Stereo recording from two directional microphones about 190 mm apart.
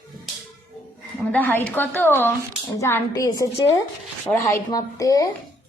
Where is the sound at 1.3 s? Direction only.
10° left (ahead or behind).